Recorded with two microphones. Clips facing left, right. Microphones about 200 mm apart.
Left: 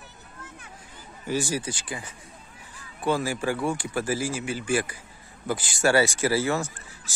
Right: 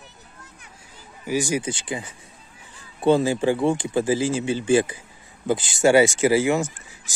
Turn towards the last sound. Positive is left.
turn(degrees=-15)  # may be behind; listen again after turning